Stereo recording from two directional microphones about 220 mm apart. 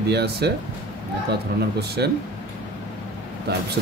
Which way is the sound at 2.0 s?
50° right (ahead or behind).